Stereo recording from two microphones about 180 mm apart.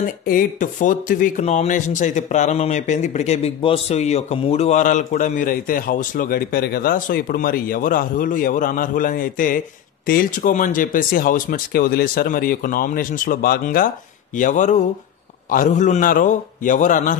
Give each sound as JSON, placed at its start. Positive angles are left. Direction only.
{"t": 0.3, "sound": "speech", "side_deg": 45}